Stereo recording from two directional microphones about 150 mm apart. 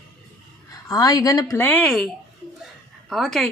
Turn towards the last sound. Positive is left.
turn(degrees=0)  # may be behind; listen again after turning